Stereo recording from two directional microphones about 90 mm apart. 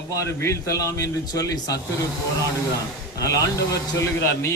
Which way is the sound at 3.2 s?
40° left (ahead or behind).